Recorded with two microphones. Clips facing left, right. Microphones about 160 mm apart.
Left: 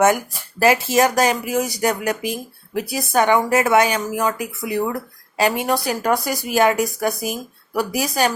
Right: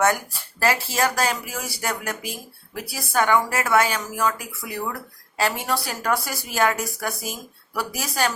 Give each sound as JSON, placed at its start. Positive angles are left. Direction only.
{"t": 0.0, "sound": "speech", "side_deg": 15}